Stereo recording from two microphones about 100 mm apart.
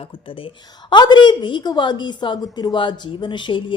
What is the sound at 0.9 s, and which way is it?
A woman's voice, 50° left (ahead or behind).